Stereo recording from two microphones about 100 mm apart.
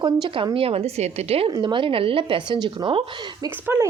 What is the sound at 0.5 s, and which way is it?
Speech, 75° right (ahead or behind).